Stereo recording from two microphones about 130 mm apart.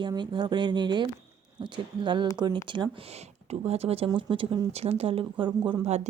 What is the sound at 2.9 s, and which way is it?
Speech, 50° right (ahead or behind).